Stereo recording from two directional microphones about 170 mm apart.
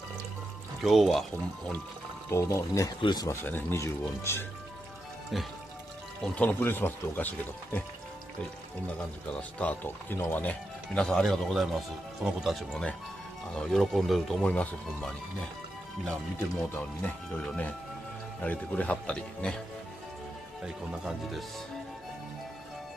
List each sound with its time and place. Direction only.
0.7 s speech: centre (ahead or behind)
2.3 s speech: 20° left (ahead or behind)
5.3 s speech: centre (ahead or behind)
8.8 s speech: 10° left (ahead or behind)
16.3 s speech: 10° left (ahead or behind)
20.6 s speech: centre (ahead or behind)